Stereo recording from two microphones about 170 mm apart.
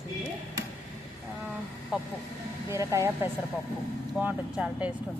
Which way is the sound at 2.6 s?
20° right (ahead or behind).